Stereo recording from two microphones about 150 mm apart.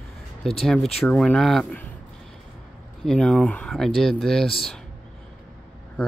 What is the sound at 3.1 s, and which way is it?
Speech, 5° left (ahead or behind).